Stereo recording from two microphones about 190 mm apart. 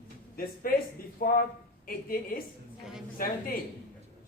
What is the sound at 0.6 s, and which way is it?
Speech, 50° left (ahead or behind).